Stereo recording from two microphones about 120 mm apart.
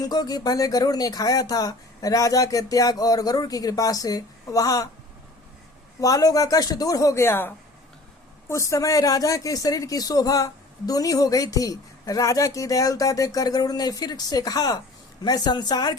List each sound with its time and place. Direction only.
0.0 s speech: 35° left (ahead or behind)
6.0 s speech: 30° left (ahead or behind)